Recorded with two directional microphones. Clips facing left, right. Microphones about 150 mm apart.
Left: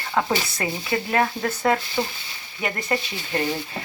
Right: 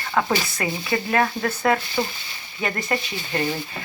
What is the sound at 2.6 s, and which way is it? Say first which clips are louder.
Speech: right 1 dB; 10° left (ahead or behind).